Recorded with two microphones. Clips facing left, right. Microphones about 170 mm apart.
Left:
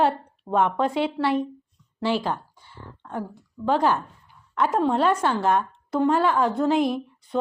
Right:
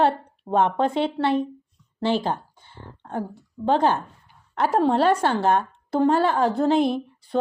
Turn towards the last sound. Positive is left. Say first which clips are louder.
# right 2 dB
turn(degrees=-30)  # may be behind; listen again after turning